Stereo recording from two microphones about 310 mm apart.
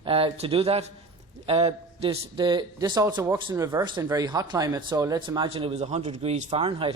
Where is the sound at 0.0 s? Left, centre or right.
Centre.